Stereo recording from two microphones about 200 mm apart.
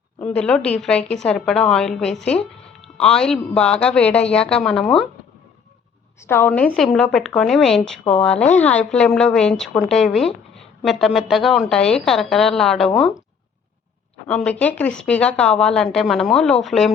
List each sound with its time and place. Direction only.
0.2 s speech: 5° left (ahead or behind)
6.1 s speech: 10° left (ahead or behind)
14.3 s speech: 5° left (ahead or behind)